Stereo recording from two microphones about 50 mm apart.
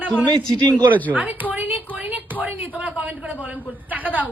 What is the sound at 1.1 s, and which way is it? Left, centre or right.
A woman's voice, right.